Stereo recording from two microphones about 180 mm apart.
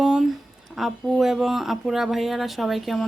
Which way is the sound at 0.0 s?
5° right (ahead or behind).